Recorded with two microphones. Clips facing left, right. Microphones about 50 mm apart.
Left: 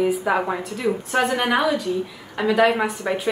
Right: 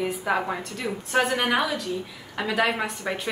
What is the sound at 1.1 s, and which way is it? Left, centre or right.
A woman's voice, centre.